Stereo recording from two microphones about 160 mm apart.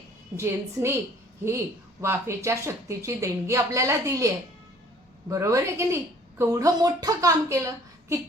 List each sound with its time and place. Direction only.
0.3 s speech: 15° right (ahead or behind)
5.3 s speech: 20° right (ahead or behind)